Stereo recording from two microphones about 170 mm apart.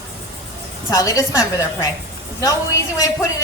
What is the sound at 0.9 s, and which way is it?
Speech, 20° left (ahead or behind).